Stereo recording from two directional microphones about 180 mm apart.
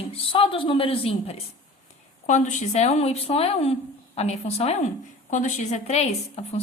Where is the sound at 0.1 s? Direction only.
30° left (ahead or behind).